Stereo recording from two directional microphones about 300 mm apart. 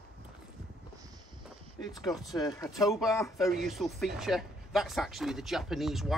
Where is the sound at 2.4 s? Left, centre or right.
Centre.